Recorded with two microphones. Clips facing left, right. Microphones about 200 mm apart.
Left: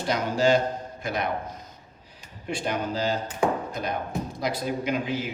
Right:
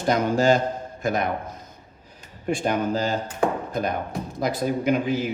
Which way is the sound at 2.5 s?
45° right (ahead or behind).